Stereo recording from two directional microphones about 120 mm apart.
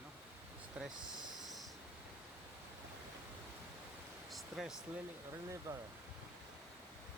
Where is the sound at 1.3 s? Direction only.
Centre (ahead or behind).